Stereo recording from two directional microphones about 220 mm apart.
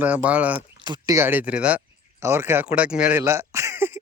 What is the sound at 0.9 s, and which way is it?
Speech, 20° right (ahead or behind).